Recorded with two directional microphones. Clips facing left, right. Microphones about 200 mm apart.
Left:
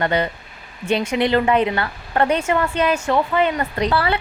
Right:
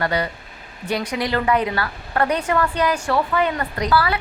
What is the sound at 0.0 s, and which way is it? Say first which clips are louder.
A woman's voice: left 2 dB; 25° left (ahead or behind).